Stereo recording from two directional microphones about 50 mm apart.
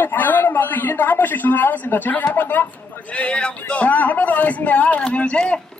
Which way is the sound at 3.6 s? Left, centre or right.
Left.